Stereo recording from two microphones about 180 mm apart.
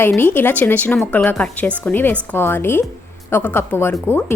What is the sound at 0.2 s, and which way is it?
A woman's voice, 10° left (ahead or behind).